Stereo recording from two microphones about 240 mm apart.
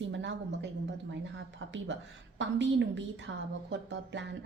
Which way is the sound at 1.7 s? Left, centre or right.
Right.